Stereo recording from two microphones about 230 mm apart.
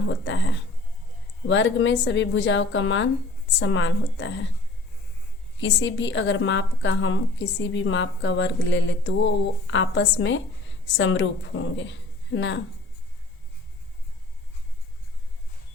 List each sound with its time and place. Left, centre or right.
0.1 s a woman's voice: left
5.5 s a woman's voice: left